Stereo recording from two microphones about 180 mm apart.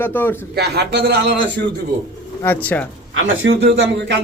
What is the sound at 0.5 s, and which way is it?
Speech, 65° right (ahead or behind).